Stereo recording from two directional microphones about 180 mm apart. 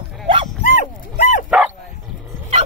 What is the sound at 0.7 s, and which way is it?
Dog, 45° left (ahead or behind).